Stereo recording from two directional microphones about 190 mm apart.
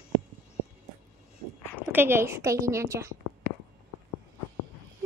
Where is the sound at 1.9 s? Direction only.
10° right (ahead or behind).